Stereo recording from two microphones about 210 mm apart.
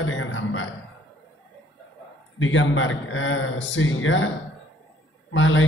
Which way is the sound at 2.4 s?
70° left (ahead or behind).